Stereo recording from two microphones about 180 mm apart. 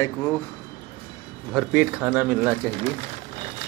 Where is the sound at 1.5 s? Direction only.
5° right (ahead or behind).